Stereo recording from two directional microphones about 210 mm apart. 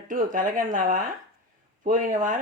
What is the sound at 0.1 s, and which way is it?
Speech, 40° right (ahead or behind).